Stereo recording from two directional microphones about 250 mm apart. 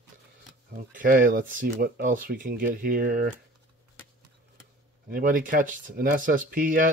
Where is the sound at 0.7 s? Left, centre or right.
Right.